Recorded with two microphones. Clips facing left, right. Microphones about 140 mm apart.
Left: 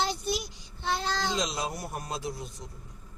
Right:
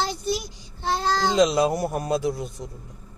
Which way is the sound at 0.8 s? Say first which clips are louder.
Right 6 dB; 35° right (ahead or behind).